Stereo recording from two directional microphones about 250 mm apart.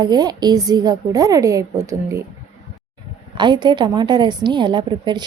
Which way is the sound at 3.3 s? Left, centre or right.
Centre.